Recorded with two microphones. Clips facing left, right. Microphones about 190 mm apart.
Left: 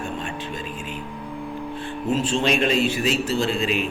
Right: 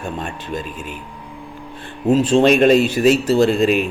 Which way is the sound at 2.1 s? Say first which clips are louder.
Right 8 dB; 40° right (ahead or behind).